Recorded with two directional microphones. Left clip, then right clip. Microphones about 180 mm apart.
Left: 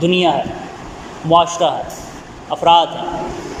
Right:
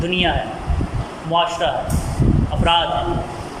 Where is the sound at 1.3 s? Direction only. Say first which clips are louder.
Left 6 dB; 35° left (ahead or behind).